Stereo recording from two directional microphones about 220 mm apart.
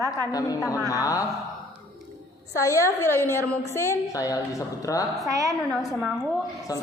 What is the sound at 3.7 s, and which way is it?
A woman's voice, 10° left (ahead or behind).